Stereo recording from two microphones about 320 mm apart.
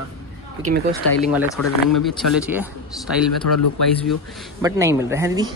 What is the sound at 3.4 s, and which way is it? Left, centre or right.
Speech, left.